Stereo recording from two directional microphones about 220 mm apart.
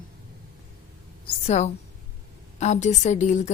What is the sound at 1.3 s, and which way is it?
A woman's voice, 30° left (ahead or behind).